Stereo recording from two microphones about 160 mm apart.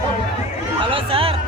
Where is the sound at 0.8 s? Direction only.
35° right (ahead or behind).